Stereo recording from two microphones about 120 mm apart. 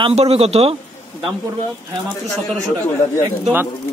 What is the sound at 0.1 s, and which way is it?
Speech, 55° right (ahead or behind).